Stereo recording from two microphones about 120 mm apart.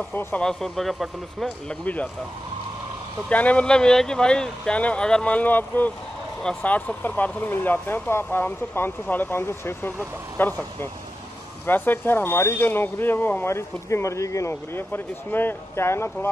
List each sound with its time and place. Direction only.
0.1 s speech: 15° left (ahead or behind); by 1.5 s centre (ahead or behind)
3.3 s speech: 10° left (ahead or behind)
11.6 s speech: 15° left (ahead or behind)